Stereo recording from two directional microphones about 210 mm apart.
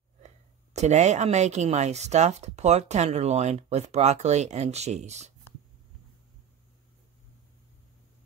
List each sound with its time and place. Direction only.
0.7 s speech: 35° right (ahead or behind)